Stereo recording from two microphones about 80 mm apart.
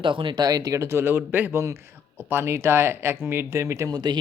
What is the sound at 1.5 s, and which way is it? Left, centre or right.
Speech, right.